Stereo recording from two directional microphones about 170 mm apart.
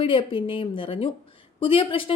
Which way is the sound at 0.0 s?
30° left (ahead or behind).